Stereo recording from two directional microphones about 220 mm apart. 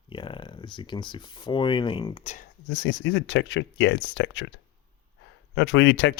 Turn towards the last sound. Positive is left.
turn(degrees=55)  # may be behind; listen again after turning